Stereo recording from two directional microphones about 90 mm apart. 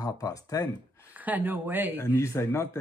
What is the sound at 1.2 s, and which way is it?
Speech, 20° right (ahead or behind).